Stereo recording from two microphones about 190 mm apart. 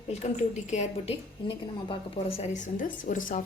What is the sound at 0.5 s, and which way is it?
A woman's voice, 35° left (ahead or behind).